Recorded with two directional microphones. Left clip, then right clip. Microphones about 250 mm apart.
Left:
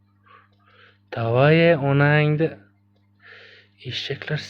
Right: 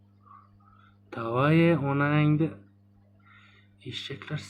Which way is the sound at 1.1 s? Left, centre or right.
Left.